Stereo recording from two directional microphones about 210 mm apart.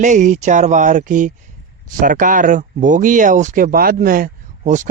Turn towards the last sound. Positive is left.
turn(degrees=-35)  # may be behind; listen again after turning